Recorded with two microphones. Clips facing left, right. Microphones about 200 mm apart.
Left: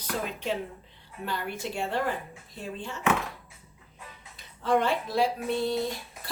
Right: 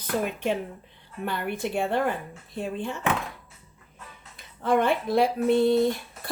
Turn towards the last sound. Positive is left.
turn(degrees=-55)  # may be behind; listen again after turning